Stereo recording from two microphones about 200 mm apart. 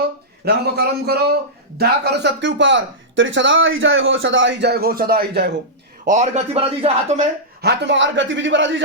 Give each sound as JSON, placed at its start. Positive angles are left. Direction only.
{"t": 0.4, "sound": "speech", "side_deg": -55}
{"t": 6.1, "sound": "speech", "side_deg": -35}
{"t": 7.6, "sound": "speech", "side_deg": -55}